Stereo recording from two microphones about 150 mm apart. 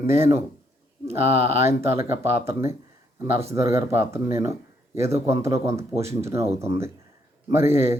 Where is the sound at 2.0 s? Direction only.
15° right (ahead or behind).